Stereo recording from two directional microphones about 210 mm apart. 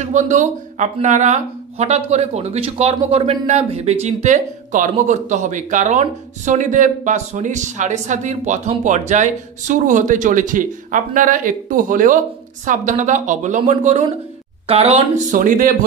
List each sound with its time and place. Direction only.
0.0 s speech: 35° right (ahead or behind)